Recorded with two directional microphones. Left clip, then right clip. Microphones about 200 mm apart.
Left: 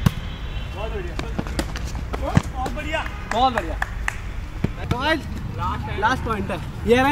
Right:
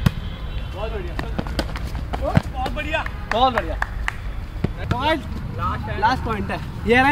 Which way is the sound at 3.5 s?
40° left (ahead or behind).